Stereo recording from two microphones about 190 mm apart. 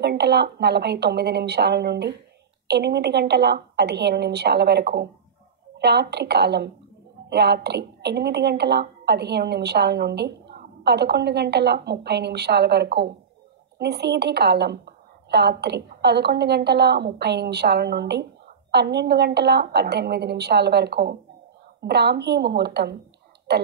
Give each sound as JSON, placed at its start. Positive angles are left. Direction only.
{"t": 0.0, "sound": "a woman's voice", "side_deg": -60}